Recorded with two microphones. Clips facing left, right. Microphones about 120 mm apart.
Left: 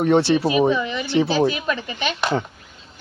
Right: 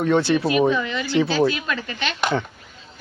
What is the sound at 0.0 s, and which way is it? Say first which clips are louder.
Speech: left 2 dB; 25° left (ahead or behind).